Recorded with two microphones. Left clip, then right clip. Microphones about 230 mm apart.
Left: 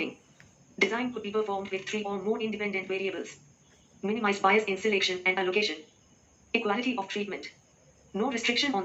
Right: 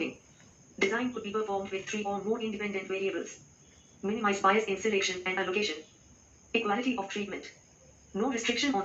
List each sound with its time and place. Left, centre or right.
0.8 s speech: left
4.0 s speech: left